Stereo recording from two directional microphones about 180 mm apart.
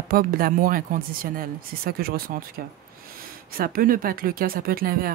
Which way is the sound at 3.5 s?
55° right (ahead or behind).